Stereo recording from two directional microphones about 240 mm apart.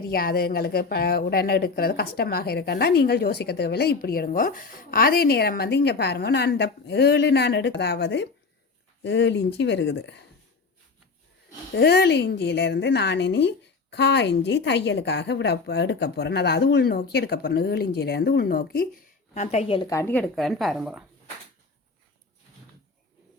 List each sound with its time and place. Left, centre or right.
0.1 s a woman's voice: left
11.7 s a woman's voice: left
19.3 s speech: left; by 21.0 s centre